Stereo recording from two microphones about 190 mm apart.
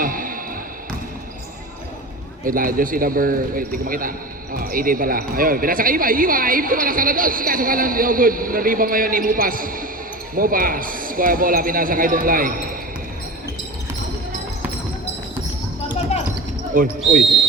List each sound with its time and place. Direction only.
0.0 s basketball bounce: 45° right (ahead or behind)
2.4 s speech: 45° right (ahead or behind)
16.7 s speech: 45° right (ahead or behind)